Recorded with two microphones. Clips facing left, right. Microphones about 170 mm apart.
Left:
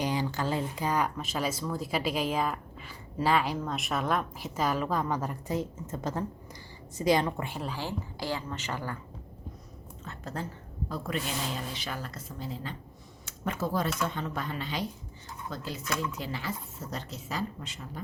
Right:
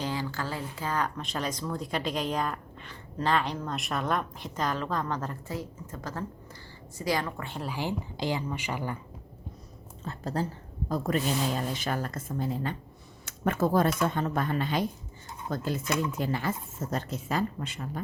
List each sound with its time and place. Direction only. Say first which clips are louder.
0.0 s a woman's voice: left 2 dB; 20° left (ahead or behind)
7.4 s speech: even; 5° left (ahead or behind)
7.7 s a woman's voice: right 3 dB; 15° right (ahead or behind)
10.0 s a woman's voice: right 6 dB; 35° right (ahead or behind); by 18.0 s 55° right (ahead or behind)